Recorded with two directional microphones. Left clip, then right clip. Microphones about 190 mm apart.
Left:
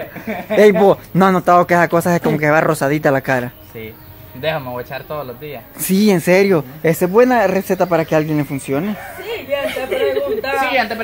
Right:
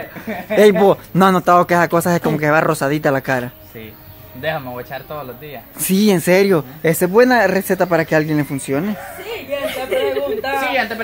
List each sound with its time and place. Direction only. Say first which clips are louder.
0.6 s speech: left 1 dB; 10° right (ahead or behind)
4.4 s speech: left 2 dB; 20° left (ahead or behind)
5.9 s speech: left 1 dB; 10° right (ahead or behind)
8.9 s speech: left 2 dB; 10° left (ahead or behind)
9.9 s a sound: even; 15° right (ahead or behind)
10.2 s speech: left 1 dB; 10° left (ahead or behind)